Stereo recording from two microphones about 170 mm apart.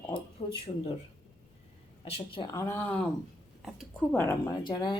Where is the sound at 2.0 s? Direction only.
30° left (ahead or behind).